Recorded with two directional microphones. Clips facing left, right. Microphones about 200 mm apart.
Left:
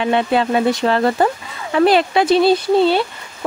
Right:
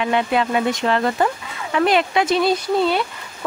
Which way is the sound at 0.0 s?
30° left (ahead or behind).